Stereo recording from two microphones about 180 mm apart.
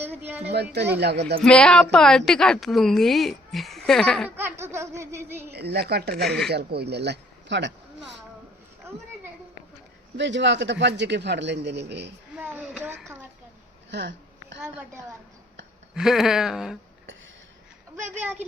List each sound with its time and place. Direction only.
0.0 s speech: 10° right (ahead or behind)
0.4 s a man's voice: 65° right (ahead or behind)
1.4 s a woman's voice: 5° left (ahead or behind)
4.4 s laughter: 15° right (ahead or behind)
5.5 s a woman's voice: 65° right (ahead or behind)
6.1 s a woman's voice: centre (ahead or behind)
6.5 s a man's voice: 65° right (ahead or behind)
8.9 s a sound: 15° right (ahead or behind)
10.2 s a man's voice: 80° right
12.4 s speech: 10° right (ahead or behind)
13.9 s a sound: 85° right
16.0 s a woman's voice: centre (ahead or behind)